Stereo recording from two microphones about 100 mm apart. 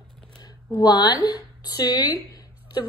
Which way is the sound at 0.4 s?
40° left (ahead or behind).